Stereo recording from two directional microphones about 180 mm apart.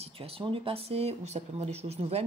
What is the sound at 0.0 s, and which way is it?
Speech, 30° right (ahead or behind).